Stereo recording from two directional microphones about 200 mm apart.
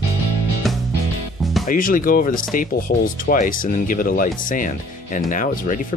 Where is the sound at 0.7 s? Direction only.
Centre (ahead or behind).